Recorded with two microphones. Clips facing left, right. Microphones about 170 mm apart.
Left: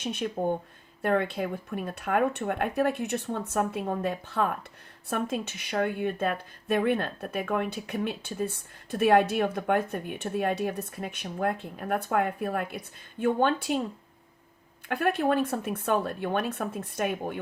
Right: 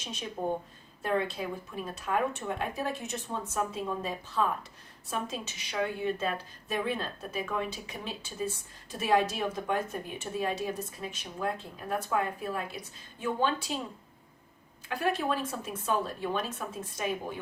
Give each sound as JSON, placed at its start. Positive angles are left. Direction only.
{"t": 0.0, "sound": "speech", "side_deg": 60}
{"t": 14.8, "sound": "speech", "side_deg": 60}